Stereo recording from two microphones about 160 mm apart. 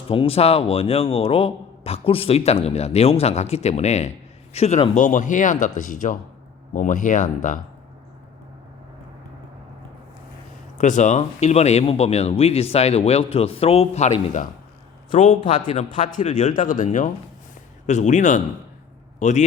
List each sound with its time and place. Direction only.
0.1 s a man's voice: 35° left (ahead or behind); by 7.6 s 55° left (ahead or behind)
10.8 s a man's voice: 50° left (ahead or behind)